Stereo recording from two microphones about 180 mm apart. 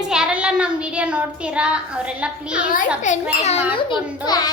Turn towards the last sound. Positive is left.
turn(degrees=20)  # may be behind; listen again after turning